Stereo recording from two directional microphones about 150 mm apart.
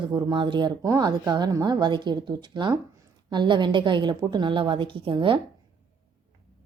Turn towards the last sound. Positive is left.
turn(degrees=-35)  # may be behind; listen again after turning